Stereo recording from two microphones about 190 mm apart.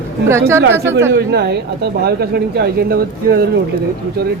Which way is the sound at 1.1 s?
60° right (ahead or behind).